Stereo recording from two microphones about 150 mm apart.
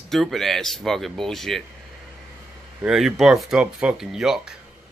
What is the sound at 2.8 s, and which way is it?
Speech, 5° right (ahead or behind).